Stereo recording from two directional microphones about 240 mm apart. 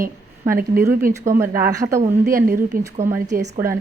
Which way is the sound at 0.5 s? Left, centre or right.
Right.